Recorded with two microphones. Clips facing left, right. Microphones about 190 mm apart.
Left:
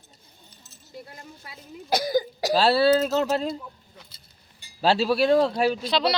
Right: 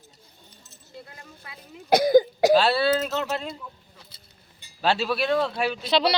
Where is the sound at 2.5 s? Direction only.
35° left (ahead or behind).